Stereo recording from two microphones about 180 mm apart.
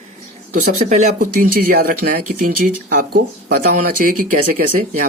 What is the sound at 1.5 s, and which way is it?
Speech, 55° right (ahead or behind).